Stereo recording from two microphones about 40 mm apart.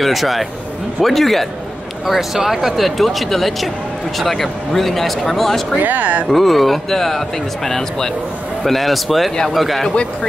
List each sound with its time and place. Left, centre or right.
0.0 s speech: centre
2.0 s speech: centre
5.8 s speech: right
6.2 s a man's voice: centre